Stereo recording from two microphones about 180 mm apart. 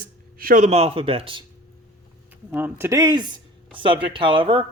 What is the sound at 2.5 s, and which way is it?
Speech, 10° right (ahead or behind).